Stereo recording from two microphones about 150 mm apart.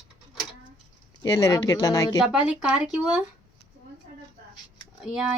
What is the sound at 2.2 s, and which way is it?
Speech, 5° right (ahead or behind).